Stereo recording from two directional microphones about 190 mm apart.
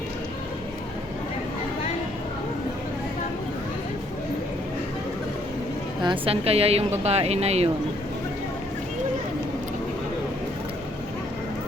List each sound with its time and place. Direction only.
6.0 s speech: 25° right (ahead or behind)